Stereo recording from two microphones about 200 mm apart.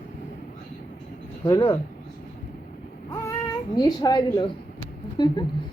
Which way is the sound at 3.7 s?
20° left (ahead or behind).